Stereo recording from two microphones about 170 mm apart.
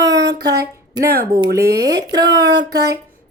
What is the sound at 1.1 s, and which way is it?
Speech, 65° right (ahead or behind).